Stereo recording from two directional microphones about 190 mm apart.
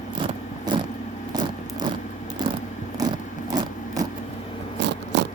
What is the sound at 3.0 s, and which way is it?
Scrape, 20° right (ahead or behind).